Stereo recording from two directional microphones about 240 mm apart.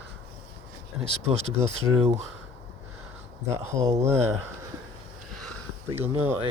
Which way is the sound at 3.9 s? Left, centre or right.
Centre.